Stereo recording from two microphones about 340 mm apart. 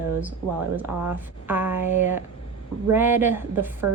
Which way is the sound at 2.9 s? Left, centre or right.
Centre.